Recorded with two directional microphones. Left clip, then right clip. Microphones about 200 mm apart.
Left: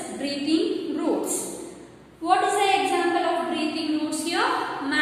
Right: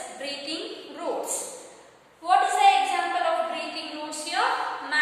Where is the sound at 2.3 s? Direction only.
Centre (ahead or behind).